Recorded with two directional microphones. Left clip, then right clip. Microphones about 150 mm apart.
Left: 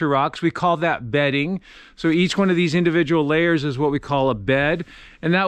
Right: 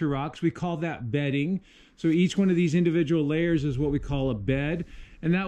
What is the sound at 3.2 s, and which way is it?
Speech, 15° right (ahead or behind).